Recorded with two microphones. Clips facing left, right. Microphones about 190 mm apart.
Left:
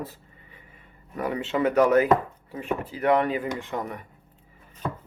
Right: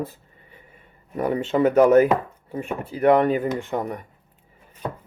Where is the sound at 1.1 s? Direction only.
35° right (ahead or behind).